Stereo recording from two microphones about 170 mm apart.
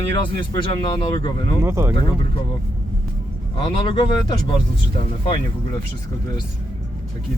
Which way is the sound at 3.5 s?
30° left (ahead or behind).